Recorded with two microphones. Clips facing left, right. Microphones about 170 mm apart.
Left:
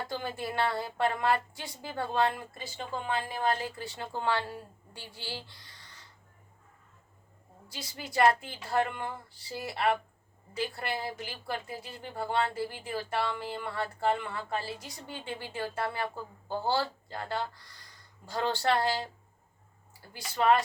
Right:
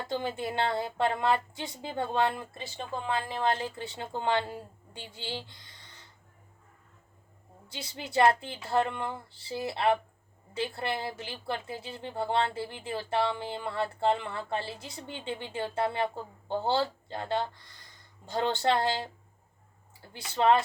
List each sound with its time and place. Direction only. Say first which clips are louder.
0.1 s a woman's voice: right 3 dB; 20° right (ahead or behind)
7.7 s a woman's voice: right 3 dB; 25° right (ahead or behind)